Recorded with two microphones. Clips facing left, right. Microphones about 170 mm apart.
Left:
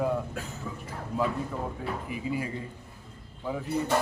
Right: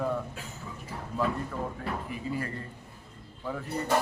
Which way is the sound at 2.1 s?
10° left (ahead or behind).